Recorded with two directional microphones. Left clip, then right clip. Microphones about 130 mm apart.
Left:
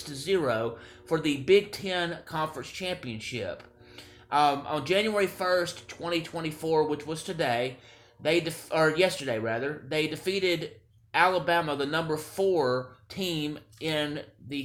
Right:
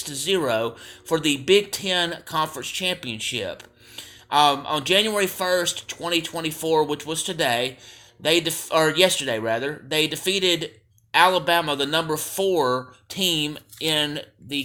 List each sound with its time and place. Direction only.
0.0 s speech: 20° right (ahead or behind)